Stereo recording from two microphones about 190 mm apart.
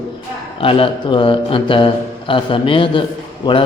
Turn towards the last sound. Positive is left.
turn(degrees=25)  # may be behind; listen again after turning